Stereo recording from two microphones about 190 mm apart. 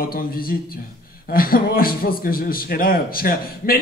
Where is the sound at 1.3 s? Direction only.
50° left (ahead or behind).